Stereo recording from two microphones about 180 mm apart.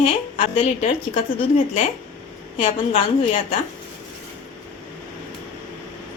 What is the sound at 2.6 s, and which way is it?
A woman's voice, 35° left (ahead or behind).